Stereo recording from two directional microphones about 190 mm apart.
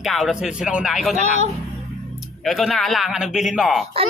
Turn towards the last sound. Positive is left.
turn(degrees=0)  # may be behind; listen again after turning